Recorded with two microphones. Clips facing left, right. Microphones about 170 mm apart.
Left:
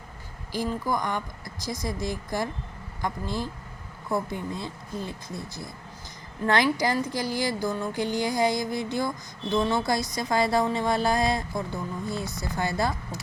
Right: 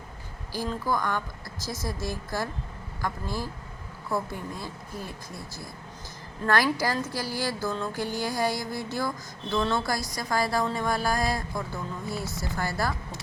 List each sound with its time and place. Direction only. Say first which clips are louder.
0.5 s a woman's voice: left 1 dB; 15° left (ahead or behind)